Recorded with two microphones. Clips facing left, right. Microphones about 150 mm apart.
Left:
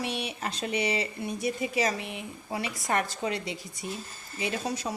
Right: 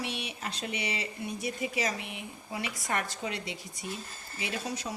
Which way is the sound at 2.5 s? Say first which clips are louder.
Left 4 dB; 35° left (ahead or behind).